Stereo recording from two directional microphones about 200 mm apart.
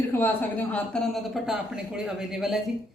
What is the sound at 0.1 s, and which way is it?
A woman's voice, 10° left (ahead or behind).